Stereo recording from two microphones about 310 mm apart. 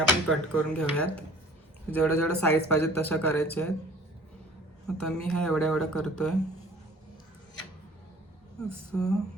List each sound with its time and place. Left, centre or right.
0.3 s speech: centre
4.9 s speech: centre
8.5 s speech: centre